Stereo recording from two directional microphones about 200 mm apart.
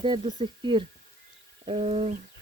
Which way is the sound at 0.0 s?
25° right (ahead or behind).